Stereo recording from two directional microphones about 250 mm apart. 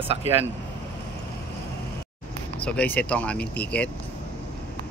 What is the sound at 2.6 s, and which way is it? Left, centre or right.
Speech, centre.